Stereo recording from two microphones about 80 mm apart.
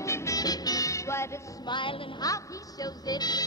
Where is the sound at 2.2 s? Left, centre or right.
Left.